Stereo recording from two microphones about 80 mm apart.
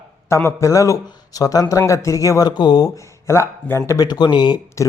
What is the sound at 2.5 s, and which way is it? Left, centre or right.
Speech, left.